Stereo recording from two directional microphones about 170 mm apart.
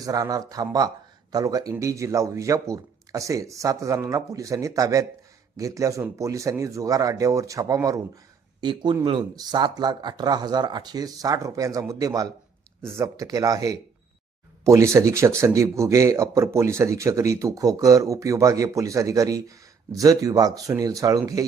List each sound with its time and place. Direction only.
0.0 s a man's voice: 20° right (ahead or behind)